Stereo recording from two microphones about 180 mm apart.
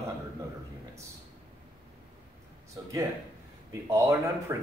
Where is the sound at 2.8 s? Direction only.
25° right (ahead or behind).